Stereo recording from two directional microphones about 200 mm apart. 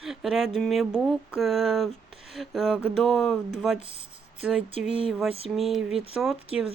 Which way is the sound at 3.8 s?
35° left (ahead or behind).